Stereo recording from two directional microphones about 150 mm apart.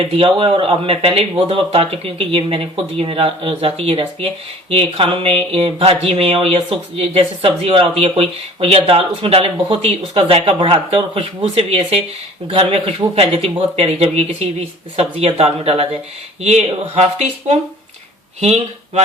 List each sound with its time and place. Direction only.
0.1 s speech: 35° right (ahead or behind)